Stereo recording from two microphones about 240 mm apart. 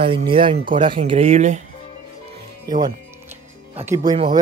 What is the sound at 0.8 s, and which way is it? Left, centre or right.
Speech, right.